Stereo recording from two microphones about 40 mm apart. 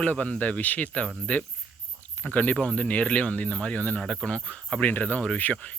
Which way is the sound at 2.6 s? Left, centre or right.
Left.